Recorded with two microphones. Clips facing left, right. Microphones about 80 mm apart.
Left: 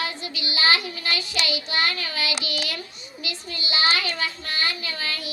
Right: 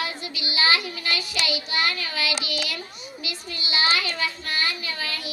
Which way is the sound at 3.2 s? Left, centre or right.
Left.